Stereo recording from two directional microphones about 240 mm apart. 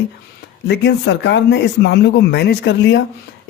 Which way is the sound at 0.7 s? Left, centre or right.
Left.